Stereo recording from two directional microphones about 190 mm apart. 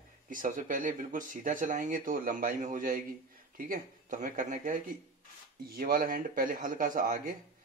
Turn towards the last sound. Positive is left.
turn(degrees=-45)  # may be behind; listen again after turning